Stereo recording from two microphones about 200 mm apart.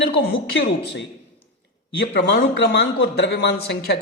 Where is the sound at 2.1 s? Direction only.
60° left (ahead or behind).